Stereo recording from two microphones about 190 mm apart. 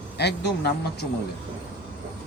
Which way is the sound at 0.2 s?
60° left (ahead or behind).